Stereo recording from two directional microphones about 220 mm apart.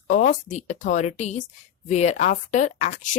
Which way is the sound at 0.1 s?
35° left (ahead or behind).